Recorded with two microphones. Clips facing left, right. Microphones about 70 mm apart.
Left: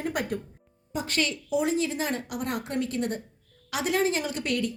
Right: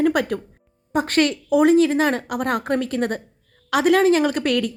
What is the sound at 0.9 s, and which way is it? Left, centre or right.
A woman's voice, right.